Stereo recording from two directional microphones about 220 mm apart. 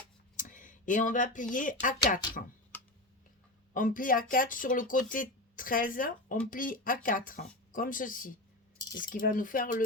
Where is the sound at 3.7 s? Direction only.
40° left (ahead or behind).